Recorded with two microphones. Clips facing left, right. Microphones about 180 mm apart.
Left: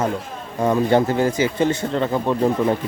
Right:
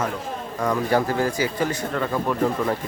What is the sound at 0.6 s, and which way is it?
A man's voice, 25° left (ahead or behind).